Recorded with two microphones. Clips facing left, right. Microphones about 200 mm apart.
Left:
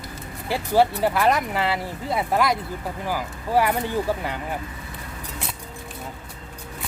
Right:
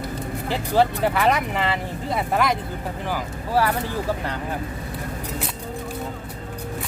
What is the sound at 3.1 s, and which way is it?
Speech, 15° left (ahead or behind).